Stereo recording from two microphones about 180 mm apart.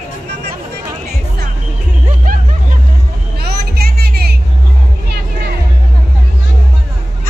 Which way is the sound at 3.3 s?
60° right (ahead or behind).